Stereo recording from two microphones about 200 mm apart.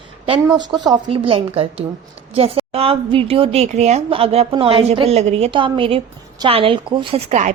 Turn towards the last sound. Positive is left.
turn(degrees=-35)  # may be behind; listen again after turning